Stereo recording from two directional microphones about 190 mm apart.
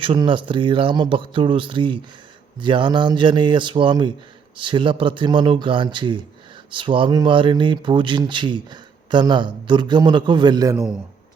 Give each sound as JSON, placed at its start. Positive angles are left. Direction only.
{"t": 0.0, "sound": "speech", "side_deg": -25}